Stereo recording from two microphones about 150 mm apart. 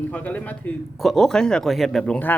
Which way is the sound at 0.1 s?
10° left (ahead or behind).